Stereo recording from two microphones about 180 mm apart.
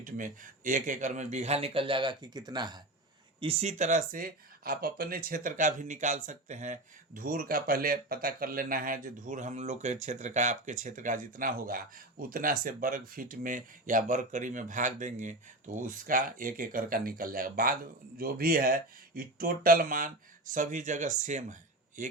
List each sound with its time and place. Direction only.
0.0 s speech: 45° right (ahead or behind); by 2.8 s 25° right (ahead or behind)
3.4 s speech: 35° right (ahead or behind)